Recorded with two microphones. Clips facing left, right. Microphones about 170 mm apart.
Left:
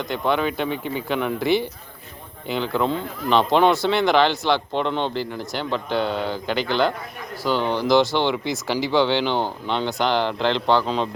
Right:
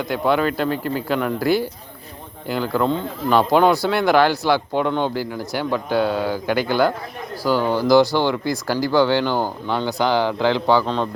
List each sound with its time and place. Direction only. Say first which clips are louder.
0.0 s speech: right 3 dB; 5° right (ahead or behind)
10.8 s speech: right 1 dB; 5° left (ahead or behind)